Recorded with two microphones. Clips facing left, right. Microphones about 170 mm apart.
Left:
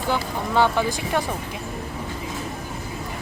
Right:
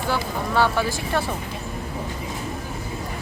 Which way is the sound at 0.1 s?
20° left (ahead or behind).